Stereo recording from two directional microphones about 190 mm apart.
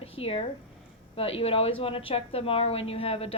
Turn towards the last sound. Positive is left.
turn(degrees=30)  # may be behind; listen again after turning